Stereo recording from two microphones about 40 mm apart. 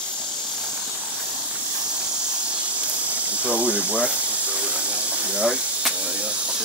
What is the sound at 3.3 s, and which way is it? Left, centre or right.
Steam, right.